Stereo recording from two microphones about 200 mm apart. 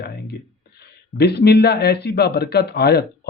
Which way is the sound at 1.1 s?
55° left (ahead or behind).